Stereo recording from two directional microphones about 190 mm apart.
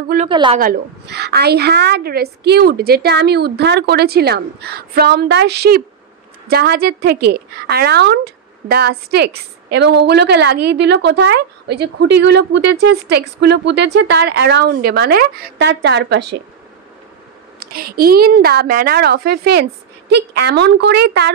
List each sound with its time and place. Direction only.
0.3 s a woman's voice: 25° right (ahead or behind)
0.6 s a woman's voice: 55° right (ahead or behind)
17.6 s a woman's voice: 50° right (ahead or behind)